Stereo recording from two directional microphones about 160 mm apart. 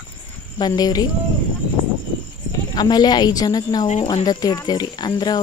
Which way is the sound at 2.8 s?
25° left (ahead or behind).